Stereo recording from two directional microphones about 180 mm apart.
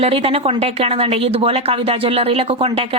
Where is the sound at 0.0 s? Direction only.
35° right (ahead or behind).